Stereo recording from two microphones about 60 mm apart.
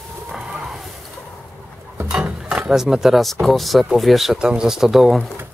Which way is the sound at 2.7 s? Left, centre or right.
Centre.